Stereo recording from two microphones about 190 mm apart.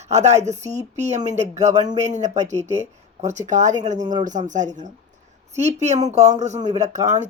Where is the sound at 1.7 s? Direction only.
20° right (ahead or behind).